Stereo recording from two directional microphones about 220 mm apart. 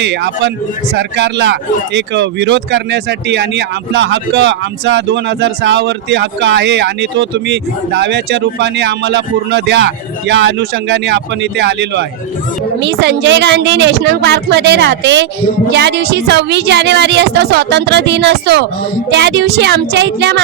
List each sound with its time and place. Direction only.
0.0 s speech: 50° right (ahead or behind)